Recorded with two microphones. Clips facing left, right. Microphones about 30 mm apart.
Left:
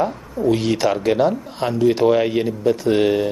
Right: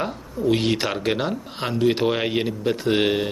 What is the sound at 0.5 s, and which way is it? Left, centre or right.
Speech, right.